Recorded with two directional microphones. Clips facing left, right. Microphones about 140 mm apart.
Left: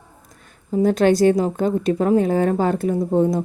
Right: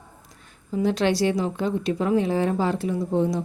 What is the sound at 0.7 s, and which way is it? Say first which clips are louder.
A woman's voice: left 6 dB; 45° left (ahead or behind).